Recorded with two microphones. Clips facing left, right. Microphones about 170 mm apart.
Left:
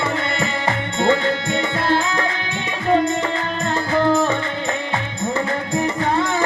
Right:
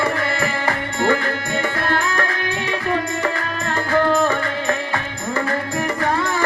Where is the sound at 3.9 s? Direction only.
20° left (ahead or behind).